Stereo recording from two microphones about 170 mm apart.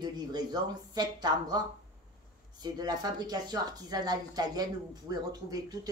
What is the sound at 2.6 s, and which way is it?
Speech, 25° right (ahead or behind).